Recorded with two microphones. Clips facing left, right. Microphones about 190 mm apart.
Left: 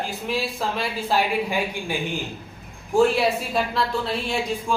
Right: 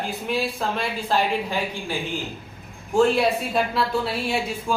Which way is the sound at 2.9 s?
Centre (ahead or behind).